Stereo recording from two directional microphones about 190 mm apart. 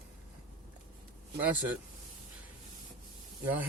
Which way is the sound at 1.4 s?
10° right (ahead or behind).